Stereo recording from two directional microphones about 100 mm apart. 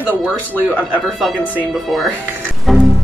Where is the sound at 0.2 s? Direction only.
15° right (ahead or behind).